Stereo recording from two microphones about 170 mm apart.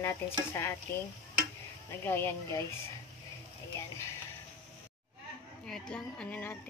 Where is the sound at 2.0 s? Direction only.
15° left (ahead or behind).